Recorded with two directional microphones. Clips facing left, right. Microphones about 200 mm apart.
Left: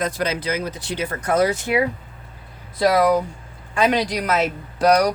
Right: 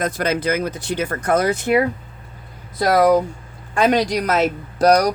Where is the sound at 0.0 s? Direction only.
50° right (ahead or behind).